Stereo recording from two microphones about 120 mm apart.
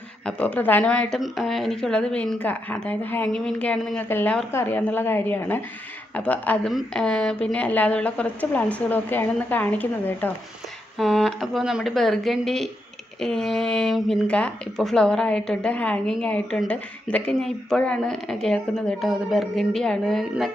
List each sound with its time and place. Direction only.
0.3 s a woman's voice: 10° left (ahead or behind)
10.9 s speech: centre (ahead or behind)